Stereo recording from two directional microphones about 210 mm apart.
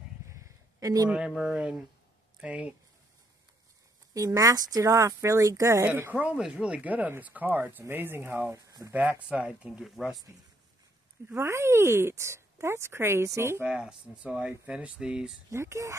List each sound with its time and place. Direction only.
0.3 s a sound: 15° right (ahead or behind)
1.1 s speech: 5° right (ahead or behind)
4.1 s speech: 15° right (ahead or behind); by 10.2 s centre (ahead or behind)
11.2 s speech: 15° right (ahead or behind)